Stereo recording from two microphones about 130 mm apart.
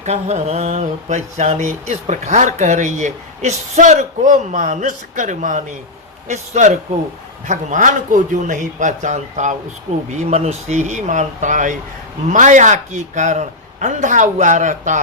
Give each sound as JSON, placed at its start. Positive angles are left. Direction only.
{"t": 0.0, "sound": "speech", "side_deg": -60}
{"t": 6.2, "sound": "speech", "side_deg": -60}
{"t": 7.4, "sound": "speech", "side_deg": -75}
{"t": 10.2, "sound": "speech", "side_deg": -60}